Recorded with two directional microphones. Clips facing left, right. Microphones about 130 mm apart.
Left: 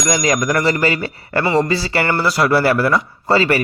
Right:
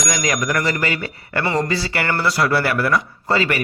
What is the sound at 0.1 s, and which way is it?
Speech, 30° left (ahead or behind).